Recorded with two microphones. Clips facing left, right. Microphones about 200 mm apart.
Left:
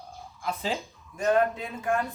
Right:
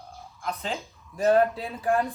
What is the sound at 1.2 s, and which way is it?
Speech, 35° right (ahead or behind).